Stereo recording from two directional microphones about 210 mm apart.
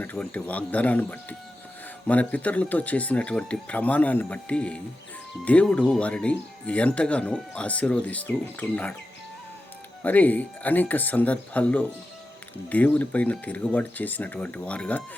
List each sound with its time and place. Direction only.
0.0 s speech: 5° left (ahead or behind)
10.0 s speech: 10° left (ahead or behind)